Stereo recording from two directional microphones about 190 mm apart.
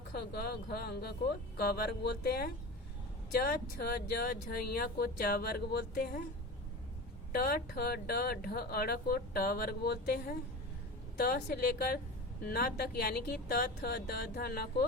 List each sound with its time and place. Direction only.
0.1 s speech: 55° left (ahead or behind)
7.3 s speech: 55° left (ahead or behind)